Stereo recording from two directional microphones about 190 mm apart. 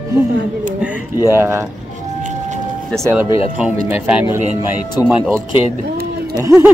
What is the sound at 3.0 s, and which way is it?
Speech, 10° right (ahead or behind).